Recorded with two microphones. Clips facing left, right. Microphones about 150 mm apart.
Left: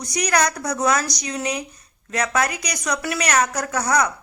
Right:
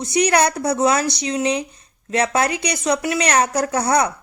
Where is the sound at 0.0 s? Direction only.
25° right (ahead or behind).